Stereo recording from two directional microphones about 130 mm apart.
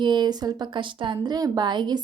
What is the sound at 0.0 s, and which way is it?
A woman's voice, 35° right (ahead or behind).